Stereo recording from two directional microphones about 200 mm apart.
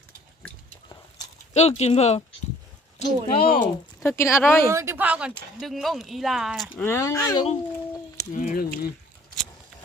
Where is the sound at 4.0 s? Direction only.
15° left (ahead or behind).